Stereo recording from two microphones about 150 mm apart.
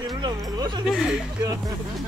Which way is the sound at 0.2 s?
25° right (ahead or behind).